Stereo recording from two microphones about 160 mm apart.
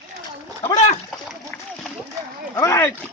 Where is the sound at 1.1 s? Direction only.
5° left (ahead or behind).